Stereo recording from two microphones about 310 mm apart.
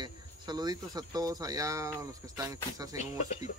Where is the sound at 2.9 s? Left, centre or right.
Left.